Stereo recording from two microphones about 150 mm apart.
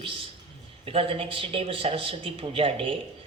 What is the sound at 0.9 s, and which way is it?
Speech, 40° right (ahead or behind).